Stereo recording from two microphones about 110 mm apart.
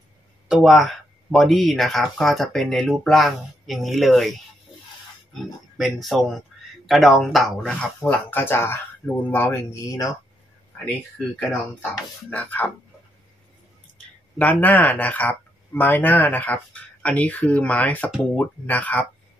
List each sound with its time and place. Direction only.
0.5 s speech: 5° right (ahead or behind)
5.8 s speech: centre (ahead or behind); by 10.0 s 25° left (ahead or behind)
11.3 s speech: 15° left (ahead or behind)
13.9 s speech: 15° left (ahead or behind)